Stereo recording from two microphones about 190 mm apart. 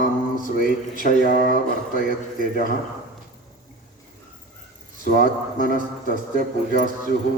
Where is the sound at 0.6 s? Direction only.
50° left (ahead or behind).